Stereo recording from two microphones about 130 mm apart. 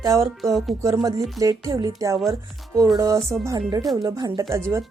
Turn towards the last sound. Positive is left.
turn(degrees=-20)  # may be behind; listen again after turning